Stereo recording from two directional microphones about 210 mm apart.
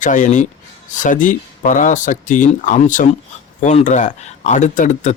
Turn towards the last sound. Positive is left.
turn(degrees=35)  # may be behind; listen again after turning